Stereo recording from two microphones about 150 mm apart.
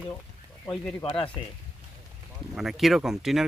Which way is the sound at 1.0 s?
35° left (ahead or behind).